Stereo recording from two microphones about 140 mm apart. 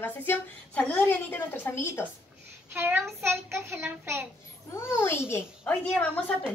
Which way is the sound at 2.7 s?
15° right (ahead or behind).